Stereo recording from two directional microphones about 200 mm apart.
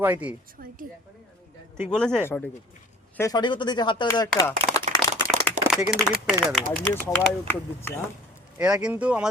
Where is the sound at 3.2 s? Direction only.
20° left (ahead or behind).